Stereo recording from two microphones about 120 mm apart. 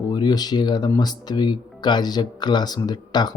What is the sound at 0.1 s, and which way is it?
Speech, 35° left (ahead or behind).